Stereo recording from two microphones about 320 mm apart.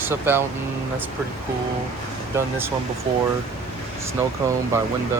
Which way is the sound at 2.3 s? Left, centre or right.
Centre.